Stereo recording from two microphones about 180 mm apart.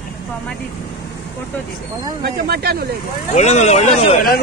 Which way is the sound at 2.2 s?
60° right (ahead or behind).